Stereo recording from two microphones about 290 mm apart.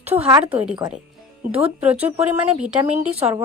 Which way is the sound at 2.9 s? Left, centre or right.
Right.